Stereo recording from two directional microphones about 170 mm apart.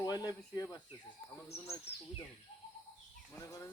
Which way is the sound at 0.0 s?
20° left (ahead or behind).